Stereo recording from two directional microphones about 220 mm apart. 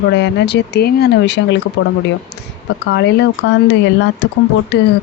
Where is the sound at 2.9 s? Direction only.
50° left (ahead or behind).